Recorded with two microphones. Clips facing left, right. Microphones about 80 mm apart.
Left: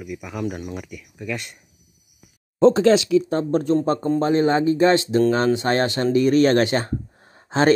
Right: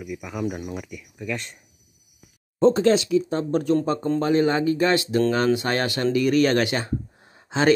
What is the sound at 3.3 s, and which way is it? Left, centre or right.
Speech, left.